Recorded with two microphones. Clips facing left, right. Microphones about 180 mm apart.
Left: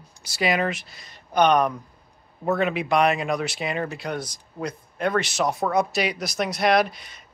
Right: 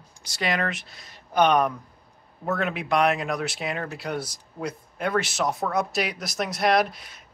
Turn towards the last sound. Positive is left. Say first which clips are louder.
# left 2 dB
turn(degrees=0)  # may be behind; listen again after turning